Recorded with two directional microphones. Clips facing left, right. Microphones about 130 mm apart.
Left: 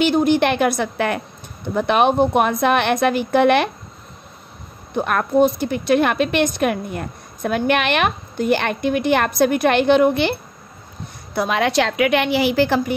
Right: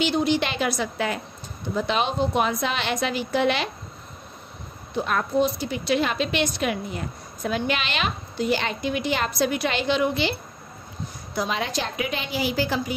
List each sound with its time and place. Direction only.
0.0 s a woman's voice: 50° left (ahead or behind)
4.9 s a woman's voice: 55° left (ahead or behind)
11.3 s a woman's voice: 65° left (ahead or behind)